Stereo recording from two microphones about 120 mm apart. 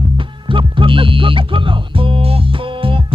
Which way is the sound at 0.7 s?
45° right (ahead or behind).